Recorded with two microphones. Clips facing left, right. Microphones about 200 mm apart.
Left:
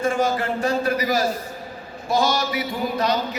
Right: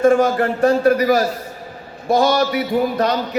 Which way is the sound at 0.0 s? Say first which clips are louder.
Right 8 dB; 55° right (ahead or behind).